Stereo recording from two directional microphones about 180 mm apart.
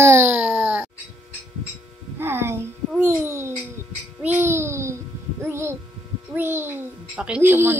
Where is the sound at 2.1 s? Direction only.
15° right (ahead or behind).